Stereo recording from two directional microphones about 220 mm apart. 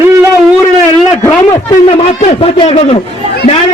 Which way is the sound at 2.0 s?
30° left (ahead or behind).